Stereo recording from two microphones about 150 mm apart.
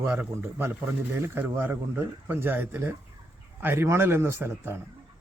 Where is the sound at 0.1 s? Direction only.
15° right (ahead or behind).